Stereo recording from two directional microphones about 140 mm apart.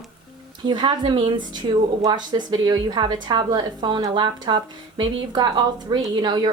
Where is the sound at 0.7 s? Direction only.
35° right (ahead or behind).